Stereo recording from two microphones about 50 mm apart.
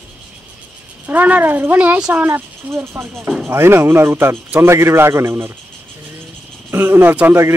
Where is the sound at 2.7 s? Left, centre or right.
Right.